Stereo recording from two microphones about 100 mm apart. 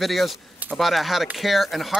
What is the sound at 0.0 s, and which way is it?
Speech, centre (ahead or behind).